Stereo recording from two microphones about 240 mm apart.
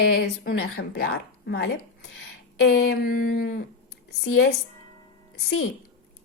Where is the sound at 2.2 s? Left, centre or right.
Left.